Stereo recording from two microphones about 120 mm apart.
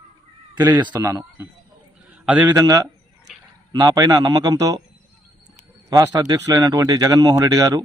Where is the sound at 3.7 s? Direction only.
35° right (ahead or behind).